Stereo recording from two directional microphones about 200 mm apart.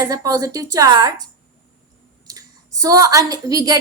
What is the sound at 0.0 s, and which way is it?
A woman's voice, 20° right (ahead or behind).